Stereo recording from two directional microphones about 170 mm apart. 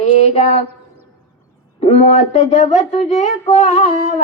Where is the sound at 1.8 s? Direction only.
40° left (ahead or behind).